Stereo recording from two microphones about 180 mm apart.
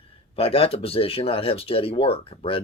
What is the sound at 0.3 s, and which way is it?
Speech, 35° left (ahead or behind).